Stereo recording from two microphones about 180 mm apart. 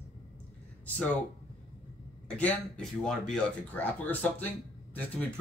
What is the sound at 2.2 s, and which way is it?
Speech, 5° left (ahead or behind).